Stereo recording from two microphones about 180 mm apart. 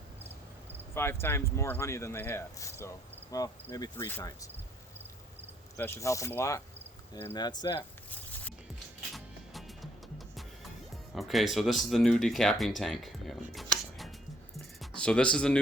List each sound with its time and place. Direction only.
0.9 s speech: 15° left (ahead or behind)
3.3 s cricket: 20° left (ahead or behind)
5.7 s speech: 15° left (ahead or behind)
7.1 s cricket: 15° left (ahead or behind)
9.1 s music: centre (ahead or behind)
11.1 s speech: centre (ahead or behind)
14.5 s music: 5° left (ahead or behind)